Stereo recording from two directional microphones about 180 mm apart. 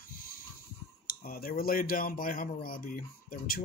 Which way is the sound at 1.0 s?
55° left (ahead or behind).